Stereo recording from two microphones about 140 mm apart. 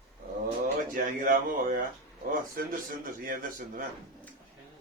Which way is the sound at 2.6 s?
90° right.